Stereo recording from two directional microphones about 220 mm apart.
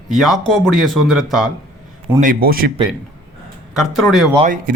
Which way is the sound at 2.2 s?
40° right (ahead or behind).